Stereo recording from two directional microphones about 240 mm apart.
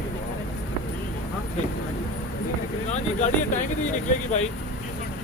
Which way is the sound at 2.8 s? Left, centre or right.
Left.